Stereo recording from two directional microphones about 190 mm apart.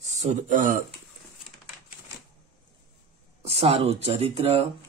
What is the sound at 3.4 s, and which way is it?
Speech, 30° right (ahead or behind).